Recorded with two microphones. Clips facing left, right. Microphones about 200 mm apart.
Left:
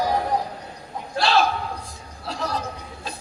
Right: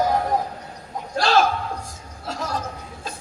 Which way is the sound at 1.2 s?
45° right (ahead or behind).